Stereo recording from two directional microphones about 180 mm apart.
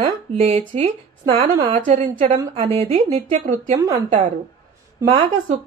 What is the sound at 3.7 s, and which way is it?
Speech, 20° right (ahead or behind).